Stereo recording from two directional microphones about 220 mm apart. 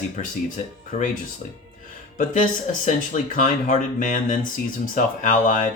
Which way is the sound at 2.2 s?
35° left (ahead or behind).